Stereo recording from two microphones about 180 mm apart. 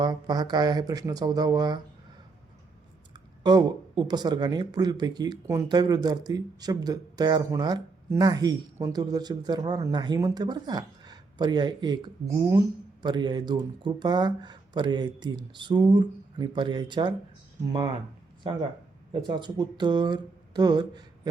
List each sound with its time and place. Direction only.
0.0 s speech: 20° right (ahead or behind)
3.1 s speech: 25° right (ahead or behind)
19.1 s speech: 25° right (ahead or behind)